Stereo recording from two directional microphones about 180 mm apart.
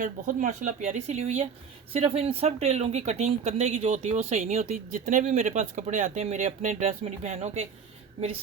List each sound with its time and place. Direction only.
0.0 s speech: 50° right (ahead or behind)